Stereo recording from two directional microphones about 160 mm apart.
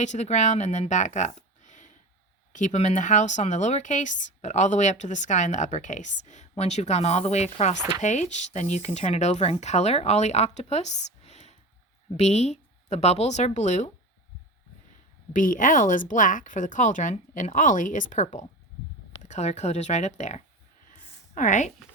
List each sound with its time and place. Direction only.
0.0 s a woman's voice: 45° left (ahead or behind)
15.3 s speech: 55° left (ahead or behind)
20.9 s a sound: 50° left (ahead or behind)